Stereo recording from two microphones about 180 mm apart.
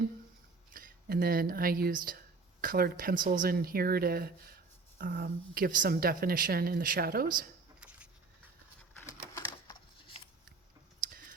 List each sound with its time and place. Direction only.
0.7 s speech: 50° right (ahead or behind)
7.8 s a sound: 5° right (ahead or behind)
9.0 s typewriter: 15° left (ahead or behind)